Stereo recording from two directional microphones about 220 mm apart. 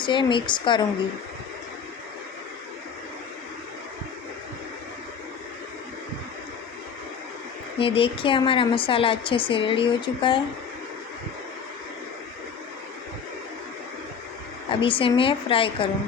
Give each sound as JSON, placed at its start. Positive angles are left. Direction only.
{"t": 0.0, "sound": "speech", "side_deg": 20}
{"t": 7.8, "sound": "speech", "side_deg": 25}
{"t": 14.7, "sound": "speech", "side_deg": 25}